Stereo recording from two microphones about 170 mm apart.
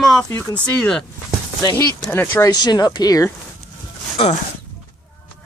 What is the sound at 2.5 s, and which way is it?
Speech, 25° left (ahead or behind).